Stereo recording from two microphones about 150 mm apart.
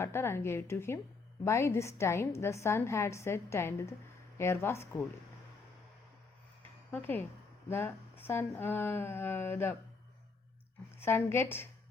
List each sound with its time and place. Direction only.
0.0 s a woman's voice: 15° left (ahead or behind)
6.9 s a woman's voice: 15° left (ahead or behind)
11.0 s a woman's voice: 15° left (ahead or behind)